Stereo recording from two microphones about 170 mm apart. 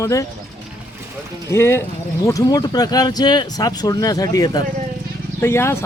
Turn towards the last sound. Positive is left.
turn(degrees=15)  # may be behind; listen again after turning